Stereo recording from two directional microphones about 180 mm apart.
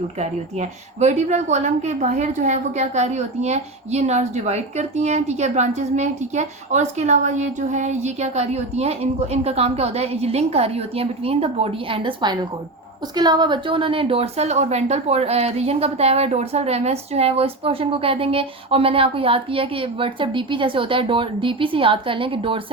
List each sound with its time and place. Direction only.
0.2 s a woman's voice: 40° right (ahead or behind)